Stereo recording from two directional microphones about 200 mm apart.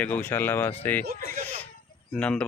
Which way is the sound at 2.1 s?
5° left (ahead or behind).